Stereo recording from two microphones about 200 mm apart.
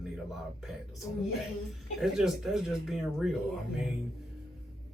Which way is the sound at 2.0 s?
Centre (ahead or behind).